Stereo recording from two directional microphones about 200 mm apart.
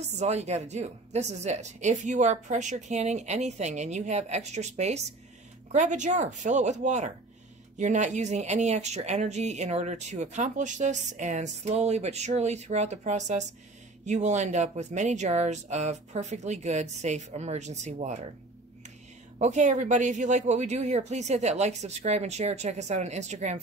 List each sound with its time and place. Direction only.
0.0 s speech: 35° right (ahead or behind)
19.3 s speech: 35° right (ahead or behind)